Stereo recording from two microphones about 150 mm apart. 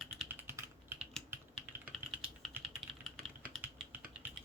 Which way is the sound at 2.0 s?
15° right (ahead or behind).